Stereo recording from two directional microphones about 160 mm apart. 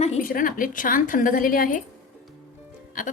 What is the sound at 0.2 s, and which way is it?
A woman's voice, 60° left (ahead or behind).